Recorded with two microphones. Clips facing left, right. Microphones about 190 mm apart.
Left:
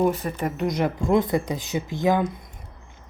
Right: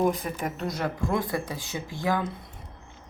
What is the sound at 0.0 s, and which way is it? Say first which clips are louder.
Speech: left 3 dB; 5° left (ahead or behind).